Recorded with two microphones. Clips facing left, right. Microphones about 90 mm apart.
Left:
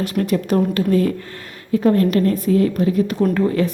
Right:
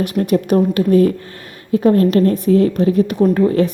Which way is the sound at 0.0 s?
20° right (ahead or behind).